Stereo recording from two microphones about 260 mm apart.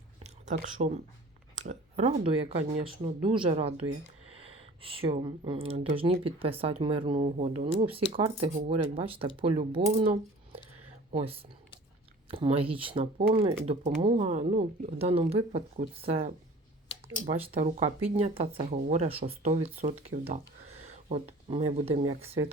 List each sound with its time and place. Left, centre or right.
0.2 s a sound: right
1.5 s speech: right
11.1 s speech: right
17.3 s speech: right